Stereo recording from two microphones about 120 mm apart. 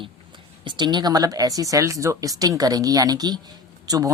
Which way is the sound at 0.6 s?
40° right (ahead or behind).